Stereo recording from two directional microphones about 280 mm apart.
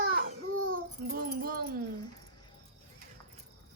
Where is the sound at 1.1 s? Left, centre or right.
Right.